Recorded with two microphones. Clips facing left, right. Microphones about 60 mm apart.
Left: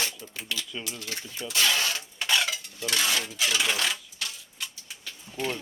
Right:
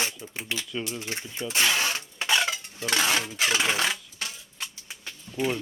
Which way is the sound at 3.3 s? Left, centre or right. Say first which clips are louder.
Right 2 dB; right.